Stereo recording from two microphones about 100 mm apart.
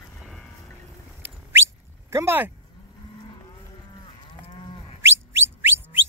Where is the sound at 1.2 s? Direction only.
20° right (ahead or behind).